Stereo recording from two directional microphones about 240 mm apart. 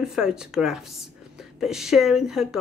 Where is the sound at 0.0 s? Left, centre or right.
Centre.